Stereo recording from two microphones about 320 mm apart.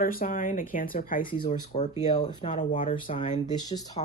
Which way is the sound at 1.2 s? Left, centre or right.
Centre.